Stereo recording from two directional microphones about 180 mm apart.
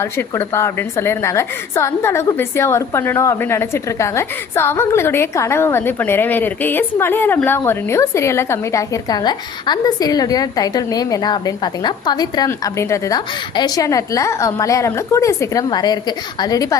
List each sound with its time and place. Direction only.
0.0 s a woman's voice: 15° left (ahead or behind)